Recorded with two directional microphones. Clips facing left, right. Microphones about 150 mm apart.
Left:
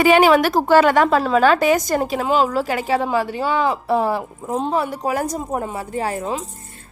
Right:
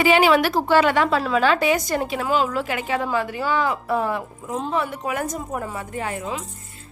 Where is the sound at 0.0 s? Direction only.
45° left (ahead or behind).